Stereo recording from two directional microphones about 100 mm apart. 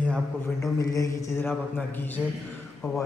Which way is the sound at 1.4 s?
20° left (ahead or behind).